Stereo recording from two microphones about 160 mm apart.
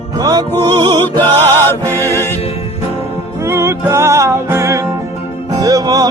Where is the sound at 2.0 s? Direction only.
15° left (ahead or behind).